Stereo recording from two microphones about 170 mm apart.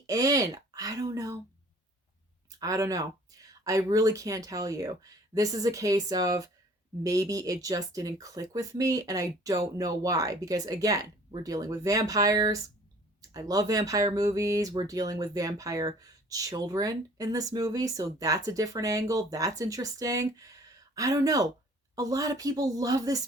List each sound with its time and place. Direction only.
0.1 s speech: 20° right (ahead or behind)
2.5 s speech: 20° right (ahead or behind)